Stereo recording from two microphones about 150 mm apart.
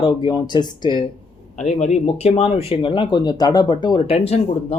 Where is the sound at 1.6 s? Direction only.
45° left (ahead or behind).